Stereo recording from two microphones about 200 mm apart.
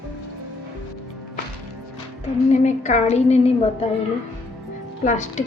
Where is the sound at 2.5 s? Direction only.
35° left (ahead or behind).